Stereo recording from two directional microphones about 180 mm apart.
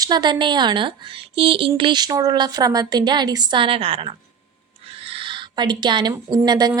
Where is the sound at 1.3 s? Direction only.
30° right (ahead or behind).